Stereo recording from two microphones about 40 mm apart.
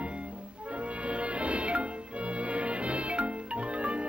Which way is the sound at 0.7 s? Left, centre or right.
Right.